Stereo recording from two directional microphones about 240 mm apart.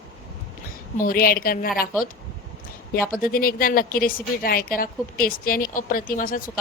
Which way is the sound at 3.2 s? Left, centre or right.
Left.